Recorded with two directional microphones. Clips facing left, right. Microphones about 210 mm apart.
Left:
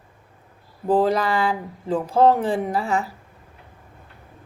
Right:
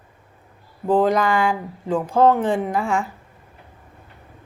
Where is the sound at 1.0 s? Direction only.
35° left (ahead or behind).